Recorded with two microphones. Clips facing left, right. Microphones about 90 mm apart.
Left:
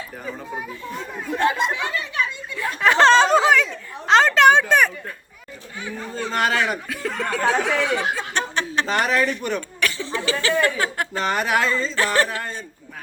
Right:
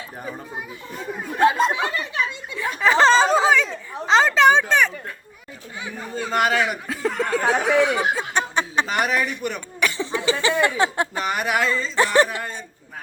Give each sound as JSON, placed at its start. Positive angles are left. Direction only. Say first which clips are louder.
{"t": 1.7, "sound": "a sound", "louder": "right 1 dB", "side_deg": -15}
{"t": 2.6, "sound": "chatter", "louder": "left 1 dB", "side_deg": 0}
{"t": 5.8, "sound": "chatter", "louder": "left 1 dB", "side_deg": -10}
{"t": 6.8, "sound": "a sound", "louder": "right 4 dB", "side_deg": -30}
{"t": 7.3, "sound": "speech", "louder": "left 1 dB", "side_deg": -25}
{"t": 11.2, "sound": "speech", "louder": "left 3 dB", "side_deg": -10}
{"t": 11.9, "sound": "speech", "louder": "right 5 dB", "side_deg": -15}